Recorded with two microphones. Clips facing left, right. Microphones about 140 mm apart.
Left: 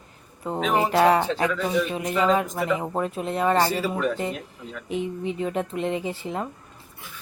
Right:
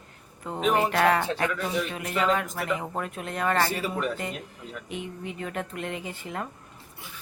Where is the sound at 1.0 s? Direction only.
20° left (ahead or behind).